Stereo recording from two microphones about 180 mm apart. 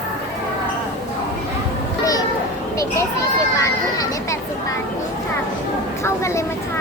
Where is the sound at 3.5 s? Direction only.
15° left (ahead or behind).